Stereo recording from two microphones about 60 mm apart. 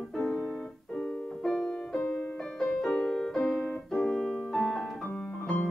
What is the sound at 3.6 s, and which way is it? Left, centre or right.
Keyboard, centre.